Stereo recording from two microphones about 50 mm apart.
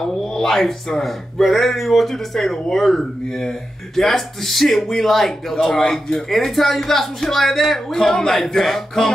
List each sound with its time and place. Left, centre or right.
0.0 s speech: centre
5.8 s speech: centre
6.1 s speech: centre